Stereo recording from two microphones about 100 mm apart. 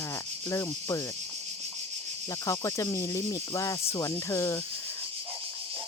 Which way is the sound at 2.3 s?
30° left (ahead or behind).